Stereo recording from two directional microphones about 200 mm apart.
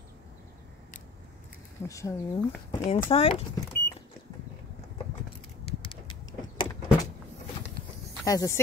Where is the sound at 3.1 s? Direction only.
30° left (ahead or behind).